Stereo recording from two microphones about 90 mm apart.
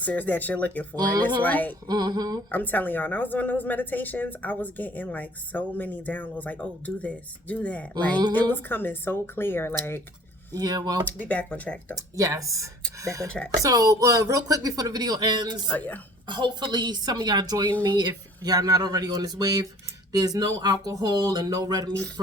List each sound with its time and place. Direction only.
0.0 s speech: 15° left (ahead or behind)
0.9 s speech: 45° right (ahead or behind)
1.4 s a woman's voice: 20° left (ahead or behind)
1.9 s speech: 50° right (ahead or behind)
2.5 s a woman's voice: 20° left (ahead or behind)
10.5 s speech: 45° right (ahead or behind)
11.0 s speech: 15° left (ahead or behind)
11.9 s speech: 40° right (ahead or behind)
13.2 s speech: 10° left (ahead or behind)
13.6 s speech: 40° right (ahead or behind)
15.7 s a woman's voice: 20° left (ahead or behind)
16.2 s speech: 60° right (ahead or behind)